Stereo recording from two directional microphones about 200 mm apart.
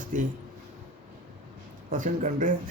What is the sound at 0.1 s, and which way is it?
Speech, 40° right (ahead or behind).